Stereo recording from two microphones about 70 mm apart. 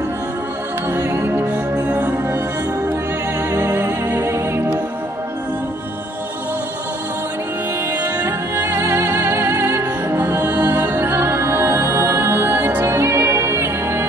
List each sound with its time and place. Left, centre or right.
0.8 s music: right
1.9 s music: right
3.5 s music: right
8.6 s music: right